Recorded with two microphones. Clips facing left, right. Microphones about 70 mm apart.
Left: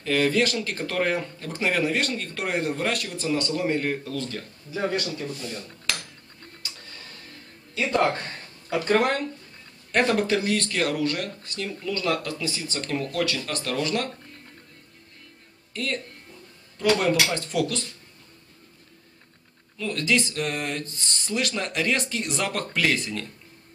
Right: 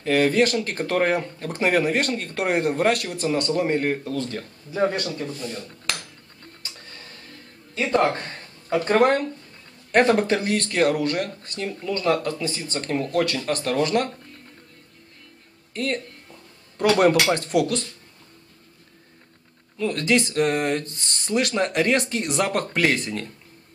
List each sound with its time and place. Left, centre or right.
0.0 s speech: right
3.6 s speech: right
7.7 s speech: right
13.2 s speech: right
15.7 s speech: right
16.9 s speech: right
19.8 s speech: right